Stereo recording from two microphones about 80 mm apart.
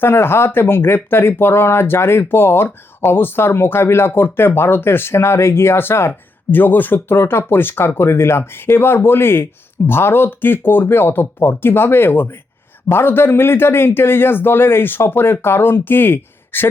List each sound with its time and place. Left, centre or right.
0.0 s speech: left